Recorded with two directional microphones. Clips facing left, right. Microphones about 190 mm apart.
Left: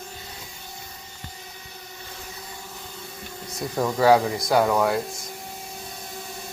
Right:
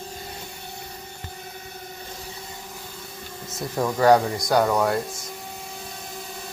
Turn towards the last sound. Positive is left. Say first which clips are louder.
# even
turn(degrees=0)  # may be behind; listen again after turning